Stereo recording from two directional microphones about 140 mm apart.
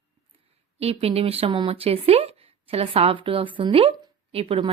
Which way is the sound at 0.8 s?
45° right (ahead or behind).